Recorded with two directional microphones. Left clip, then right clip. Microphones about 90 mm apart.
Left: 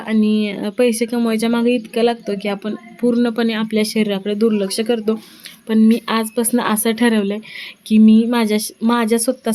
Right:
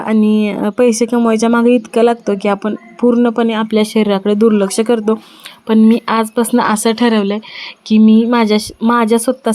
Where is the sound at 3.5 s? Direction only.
30° right (ahead or behind).